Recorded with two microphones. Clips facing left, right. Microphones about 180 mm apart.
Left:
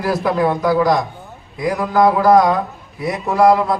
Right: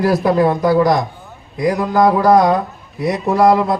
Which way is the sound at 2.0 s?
5° left (ahead or behind).